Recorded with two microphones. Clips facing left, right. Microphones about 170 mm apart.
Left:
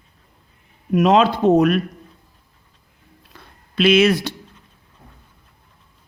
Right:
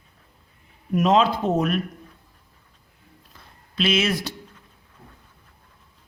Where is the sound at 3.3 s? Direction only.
65° left (ahead or behind).